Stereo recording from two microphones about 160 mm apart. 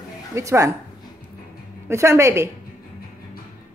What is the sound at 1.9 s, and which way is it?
Speech, 20° right (ahead or behind).